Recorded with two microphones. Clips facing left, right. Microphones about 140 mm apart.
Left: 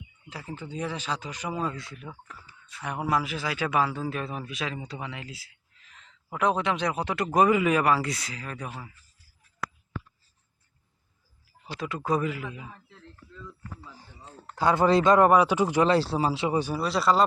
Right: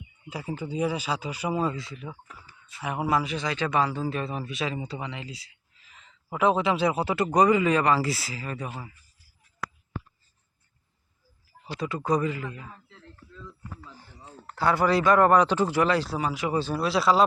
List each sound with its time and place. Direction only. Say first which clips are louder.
0.3 s speech: right 5 dB; 10° right (ahead or behind)
11.7 s speech: right 2 dB; centre (ahead or behind)
14.5 s speech: left 2 dB; 20° left (ahead or behind)
15.3 s speech: even; 10° left (ahead or behind); by 16.6 s 30° left (ahead or behind)
16.7 s speech: right 3 dB; centre (ahead or behind)